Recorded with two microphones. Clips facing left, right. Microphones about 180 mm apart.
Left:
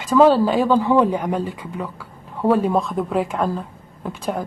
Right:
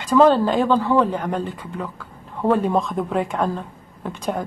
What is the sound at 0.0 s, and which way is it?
Speech, 5° left (ahead or behind).